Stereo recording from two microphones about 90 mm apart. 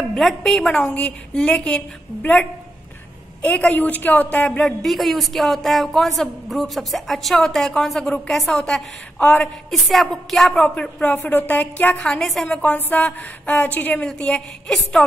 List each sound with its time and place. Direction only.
0.1 s a woman's voice: 5° left (ahead or behind)
3.4 s a woman's voice: 15° left (ahead or behind)
9.7 s a woman's voice: centre (ahead or behind)